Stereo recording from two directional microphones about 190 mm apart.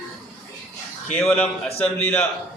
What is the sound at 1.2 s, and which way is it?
A man's voice, 5° left (ahead or behind).